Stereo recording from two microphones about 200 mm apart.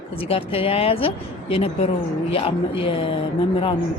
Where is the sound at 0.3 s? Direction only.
30° left (ahead or behind).